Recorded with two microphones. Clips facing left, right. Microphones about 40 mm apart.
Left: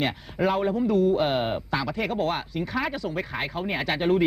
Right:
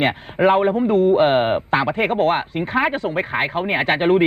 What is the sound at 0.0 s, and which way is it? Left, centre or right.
Speech, right.